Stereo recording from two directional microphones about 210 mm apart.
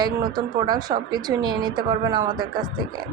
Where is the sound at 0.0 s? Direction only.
20° right (ahead or behind).